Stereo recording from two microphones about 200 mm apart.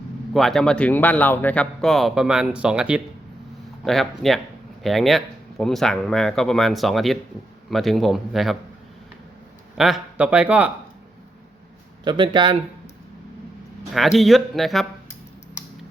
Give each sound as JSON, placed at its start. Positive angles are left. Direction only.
{"t": 0.3, "sound": "speech", "side_deg": 0}
{"t": 9.7, "sound": "speech", "side_deg": 0}
{"t": 12.0, "sound": "speech", "side_deg": -25}
{"t": 13.9, "sound": "speech", "side_deg": 0}